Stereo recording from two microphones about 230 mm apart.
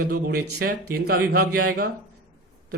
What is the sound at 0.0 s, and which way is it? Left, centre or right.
Speech, right.